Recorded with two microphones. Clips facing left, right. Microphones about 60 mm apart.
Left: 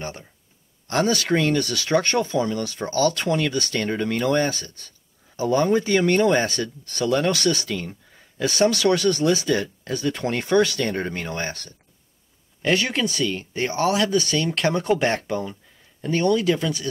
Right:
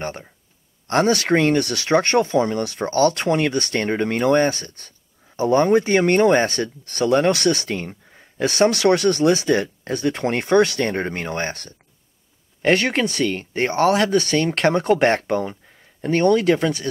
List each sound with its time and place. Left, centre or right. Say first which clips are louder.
0.0 s speech: right 4 dB; right